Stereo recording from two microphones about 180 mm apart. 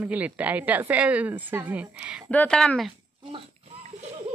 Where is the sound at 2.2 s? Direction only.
5° left (ahead or behind).